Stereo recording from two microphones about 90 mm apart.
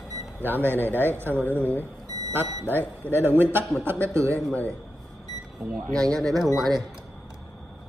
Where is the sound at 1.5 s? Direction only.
20° left (ahead or behind).